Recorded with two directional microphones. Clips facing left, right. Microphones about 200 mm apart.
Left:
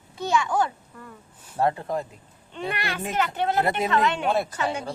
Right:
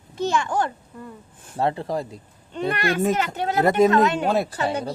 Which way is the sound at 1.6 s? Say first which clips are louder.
Right 1 dB; 30° right (ahead or behind).